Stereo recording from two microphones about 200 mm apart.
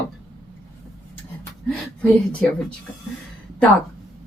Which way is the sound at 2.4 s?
5° left (ahead or behind).